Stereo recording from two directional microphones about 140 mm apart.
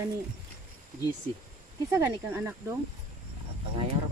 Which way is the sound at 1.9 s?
20° right (ahead or behind).